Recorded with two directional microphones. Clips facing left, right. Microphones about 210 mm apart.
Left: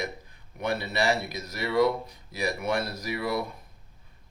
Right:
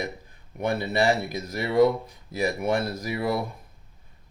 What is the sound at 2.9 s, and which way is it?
Speech, 50° right (ahead or behind).